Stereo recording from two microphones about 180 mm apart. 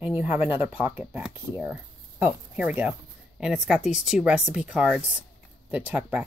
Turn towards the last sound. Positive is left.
turn(degrees=-10)  # may be behind; listen again after turning